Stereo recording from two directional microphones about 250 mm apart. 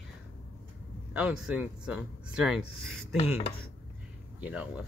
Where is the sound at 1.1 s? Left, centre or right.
Centre.